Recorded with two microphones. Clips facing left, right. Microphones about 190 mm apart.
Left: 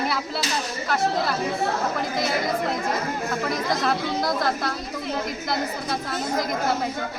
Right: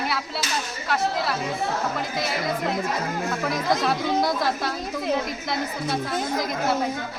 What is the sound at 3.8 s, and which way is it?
Speech, centre (ahead or behind).